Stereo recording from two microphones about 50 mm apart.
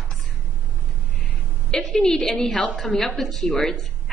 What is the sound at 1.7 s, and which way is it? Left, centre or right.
A woman's voice, centre.